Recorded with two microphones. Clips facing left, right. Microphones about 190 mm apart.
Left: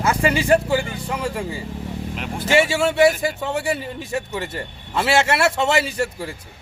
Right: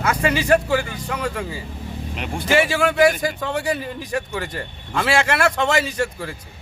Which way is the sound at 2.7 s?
25° left (ahead or behind).